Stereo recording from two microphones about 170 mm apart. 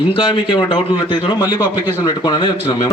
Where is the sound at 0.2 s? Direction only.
30° left (ahead or behind).